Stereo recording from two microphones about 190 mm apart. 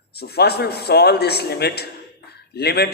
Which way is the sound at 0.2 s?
55° left (ahead or behind).